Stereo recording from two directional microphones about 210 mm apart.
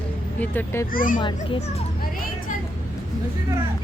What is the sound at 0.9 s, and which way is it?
Speech, 40° left (ahead or behind).